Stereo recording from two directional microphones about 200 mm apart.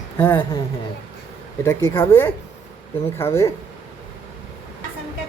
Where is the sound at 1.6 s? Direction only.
10° left (ahead or behind).